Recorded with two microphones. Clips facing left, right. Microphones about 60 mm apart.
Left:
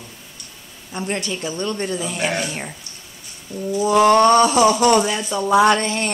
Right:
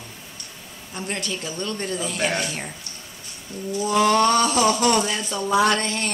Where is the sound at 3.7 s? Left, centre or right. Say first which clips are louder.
Left 5 dB; left.